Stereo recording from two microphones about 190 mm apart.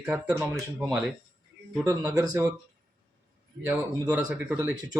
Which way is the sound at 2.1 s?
20° right (ahead or behind).